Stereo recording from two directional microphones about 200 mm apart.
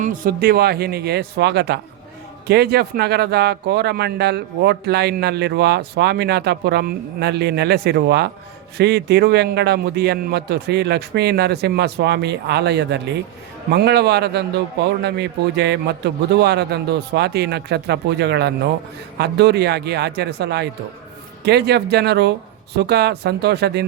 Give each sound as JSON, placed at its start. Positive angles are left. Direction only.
{"t": 0.0, "sound": "speech", "side_deg": -45}